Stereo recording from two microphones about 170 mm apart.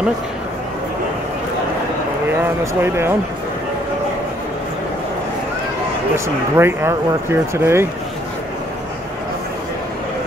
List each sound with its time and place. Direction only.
2.4 s speech: 15° right (ahead or behind)
6.1 s speech: 15° right (ahead or behind)